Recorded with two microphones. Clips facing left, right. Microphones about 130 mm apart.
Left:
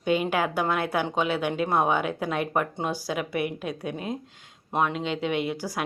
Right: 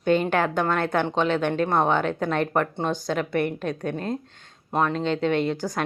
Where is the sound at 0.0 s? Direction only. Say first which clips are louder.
Right 3 dB; 10° left (ahead or behind).